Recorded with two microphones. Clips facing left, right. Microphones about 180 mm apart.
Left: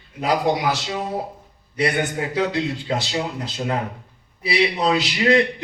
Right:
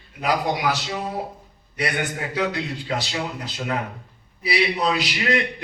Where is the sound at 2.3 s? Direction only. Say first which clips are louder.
Left 3 dB; 25° left (ahead or behind).